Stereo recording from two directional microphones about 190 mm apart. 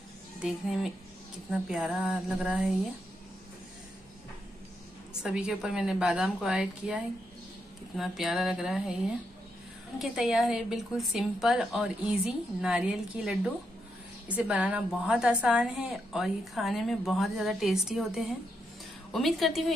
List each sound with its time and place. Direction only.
1.5 s a woman's voice: centre (ahead or behind)
5.2 s a woman's voice: 5° right (ahead or behind)
9.9 s a woman's voice: centre (ahead or behind)